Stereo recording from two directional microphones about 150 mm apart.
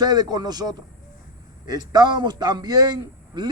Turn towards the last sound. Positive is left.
turn(degrees=-25)  # may be behind; listen again after turning